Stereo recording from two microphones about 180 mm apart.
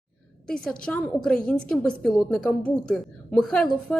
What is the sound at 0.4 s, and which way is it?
Speech, 5° left (ahead or behind).